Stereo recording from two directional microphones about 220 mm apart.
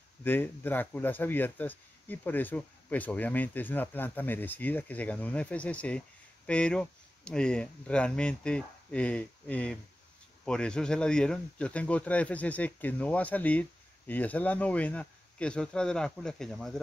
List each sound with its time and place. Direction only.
0.2 s speech: 10° left (ahead or behind)